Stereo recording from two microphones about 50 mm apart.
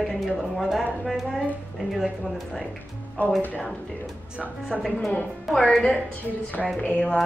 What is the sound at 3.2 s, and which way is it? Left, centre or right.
Speech, left.